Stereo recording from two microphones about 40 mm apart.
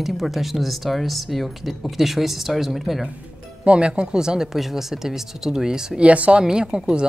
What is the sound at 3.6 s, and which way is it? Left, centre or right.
Speech, right.